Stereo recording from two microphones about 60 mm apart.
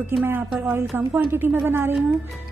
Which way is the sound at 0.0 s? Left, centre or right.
Right.